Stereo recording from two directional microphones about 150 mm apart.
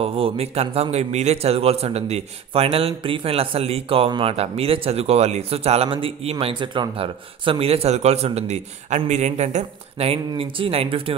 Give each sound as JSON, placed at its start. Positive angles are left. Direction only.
{"t": 0.0, "sound": "a man's voice", "side_deg": -40}